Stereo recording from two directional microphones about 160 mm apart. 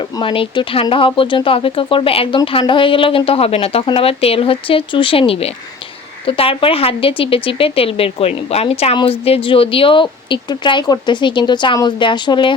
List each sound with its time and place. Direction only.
0.2 s a woman's voice: 30° left (ahead or behind)